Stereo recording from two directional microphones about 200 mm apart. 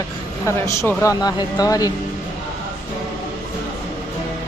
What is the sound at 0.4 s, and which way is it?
A woman's voice, 15° left (ahead or behind).